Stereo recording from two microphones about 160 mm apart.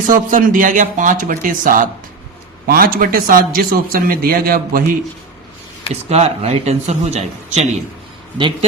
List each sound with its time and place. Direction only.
0.1 s a man's voice: 55° right (ahead or behind)
5.9 s speech: 40° right (ahead or behind)